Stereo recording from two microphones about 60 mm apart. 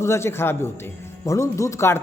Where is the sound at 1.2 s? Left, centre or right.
Left.